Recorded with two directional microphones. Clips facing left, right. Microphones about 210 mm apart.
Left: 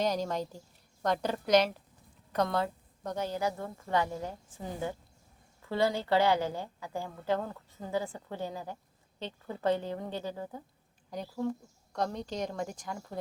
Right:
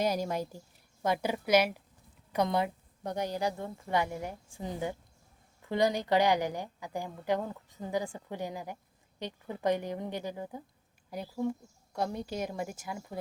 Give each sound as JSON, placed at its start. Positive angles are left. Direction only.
{"t": 0.0, "sound": "a woman's voice", "side_deg": -10}